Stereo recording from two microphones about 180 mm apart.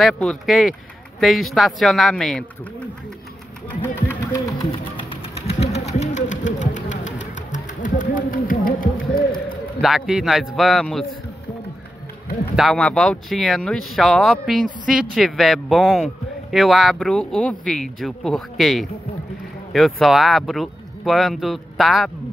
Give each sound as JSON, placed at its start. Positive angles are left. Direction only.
{"t": 0.0, "sound": "speech", "side_deg": 0}
{"t": 3.8, "sound": "sewing machine", "side_deg": 10}
{"t": 7.5, "sound": "a sound", "side_deg": 45}
{"t": 9.8, "sound": "speech", "side_deg": 0}
{"t": 12.5, "sound": "speech", "side_deg": 0}